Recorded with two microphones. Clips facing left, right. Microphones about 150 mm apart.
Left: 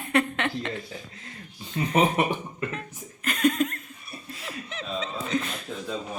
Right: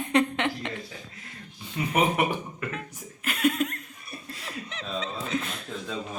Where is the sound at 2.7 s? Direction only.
5° right (ahead or behind).